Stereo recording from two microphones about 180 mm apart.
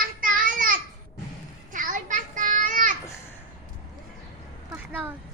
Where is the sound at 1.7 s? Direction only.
45° right (ahead or behind).